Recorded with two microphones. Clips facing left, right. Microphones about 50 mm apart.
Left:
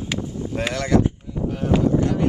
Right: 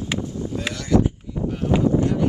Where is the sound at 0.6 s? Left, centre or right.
Left.